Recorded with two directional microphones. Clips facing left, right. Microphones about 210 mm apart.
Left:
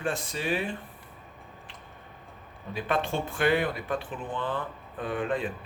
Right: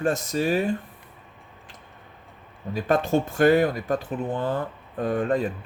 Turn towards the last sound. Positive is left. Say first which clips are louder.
# right 6 dB
turn(degrees=-40)  # may be behind; listen again after turning